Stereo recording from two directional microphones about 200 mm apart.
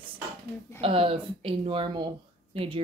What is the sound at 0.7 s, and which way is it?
Speech, 30° right (ahead or behind).